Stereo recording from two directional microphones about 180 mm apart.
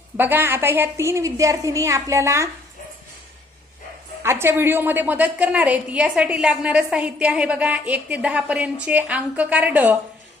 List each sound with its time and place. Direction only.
0.2 s a woman's voice: 10° right (ahead or behind)
4.2 s a woman's voice: 15° right (ahead or behind)